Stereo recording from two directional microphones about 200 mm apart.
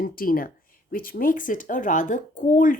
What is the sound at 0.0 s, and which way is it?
Speech, 45° left (ahead or behind).